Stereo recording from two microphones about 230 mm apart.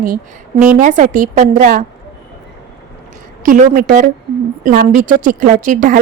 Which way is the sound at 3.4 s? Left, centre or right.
Right.